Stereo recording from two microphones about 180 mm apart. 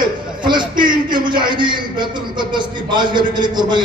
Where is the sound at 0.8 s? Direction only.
25° right (ahead or behind).